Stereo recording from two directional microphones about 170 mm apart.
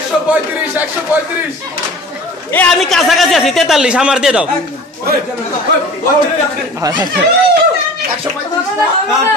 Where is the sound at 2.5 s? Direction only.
5° left (ahead or behind).